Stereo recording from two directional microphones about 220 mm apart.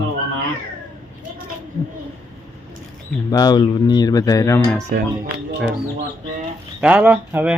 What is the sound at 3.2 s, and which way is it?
Speech, 15° left (ahead or behind).